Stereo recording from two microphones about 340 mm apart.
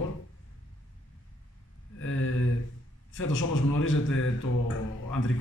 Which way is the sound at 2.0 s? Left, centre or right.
Left.